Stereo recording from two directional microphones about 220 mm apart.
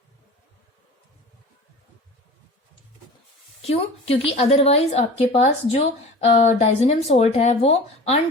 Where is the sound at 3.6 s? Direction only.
25° left (ahead or behind).